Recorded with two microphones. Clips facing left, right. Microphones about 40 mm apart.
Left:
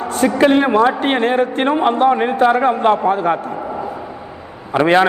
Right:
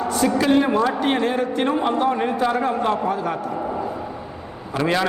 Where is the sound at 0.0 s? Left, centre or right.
Left.